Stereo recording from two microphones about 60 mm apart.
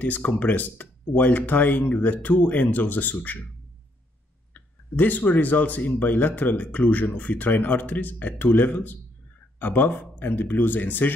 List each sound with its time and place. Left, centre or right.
0.0 s speech: left
4.6 s speech: left